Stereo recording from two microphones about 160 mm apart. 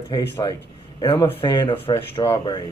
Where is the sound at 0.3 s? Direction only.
25° left (ahead or behind).